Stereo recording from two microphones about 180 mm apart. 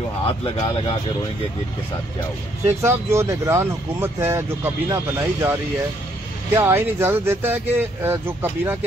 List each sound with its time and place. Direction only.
0.3 s speech: 25° left (ahead or behind)
2.6 s speech: 15° right (ahead or behind)